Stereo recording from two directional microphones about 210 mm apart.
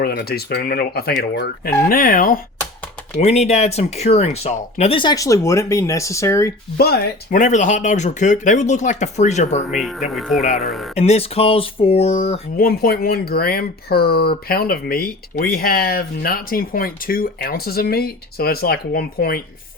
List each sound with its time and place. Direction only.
0.0 s speech: 45° left (ahead or behind)
3.2 s speech: 30° left (ahead or behind); by 6.5 s 15° left (ahead or behind)
6.7 s speech: 50° left (ahead or behind)
10.2 s speech: centre (ahead or behind)
10.9 s speech: 30° left (ahead or behind)
12.5 s speech: 45° left (ahead or behind)